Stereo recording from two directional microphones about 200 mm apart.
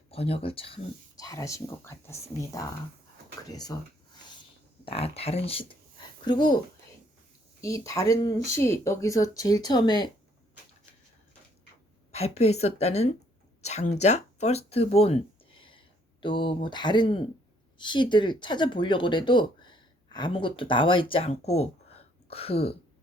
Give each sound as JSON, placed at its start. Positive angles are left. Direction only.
{"t": 0.1, "sound": "speech", "side_deg": 30}
{"t": 4.9, "sound": "speech", "side_deg": 30}
{"t": 7.6, "sound": "speech", "side_deg": 15}
{"t": 12.1, "sound": "a woman's voice", "side_deg": 30}
{"t": 22.3, "sound": "a sound", "side_deg": 30}